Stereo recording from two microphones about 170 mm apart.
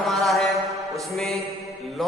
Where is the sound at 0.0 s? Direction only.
Centre (ahead or behind).